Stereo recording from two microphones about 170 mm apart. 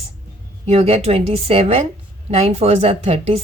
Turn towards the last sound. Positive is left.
turn(degrees=-35)  # may be behind; listen again after turning